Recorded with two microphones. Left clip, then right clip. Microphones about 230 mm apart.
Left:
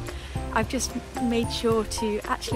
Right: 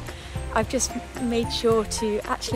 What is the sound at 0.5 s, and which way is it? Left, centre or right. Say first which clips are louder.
Speech: right 2 dB; centre.